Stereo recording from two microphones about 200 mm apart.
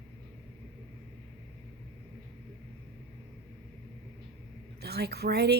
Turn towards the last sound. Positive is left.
turn(degrees=-55)  # may be behind; listen again after turning